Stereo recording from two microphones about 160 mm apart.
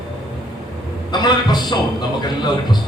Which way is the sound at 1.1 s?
25° left (ahead or behind).